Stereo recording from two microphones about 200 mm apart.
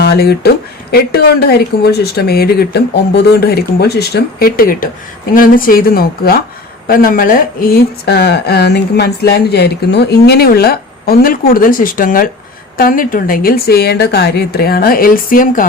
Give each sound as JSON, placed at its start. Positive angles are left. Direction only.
{"t": 0.0, "sound": "speech", "side_deg": 55}